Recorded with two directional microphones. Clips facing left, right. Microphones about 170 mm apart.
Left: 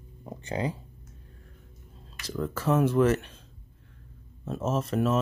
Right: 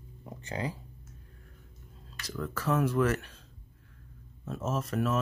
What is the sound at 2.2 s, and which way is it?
Speech, 25° left (ahead or behind).